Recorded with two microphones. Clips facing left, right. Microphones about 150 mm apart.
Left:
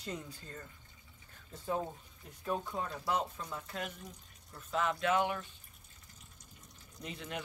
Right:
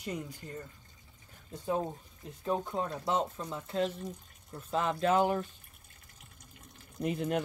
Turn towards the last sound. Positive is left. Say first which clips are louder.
# right 11 dB
turn(degrees=-50)  # may be behind; listen again after turning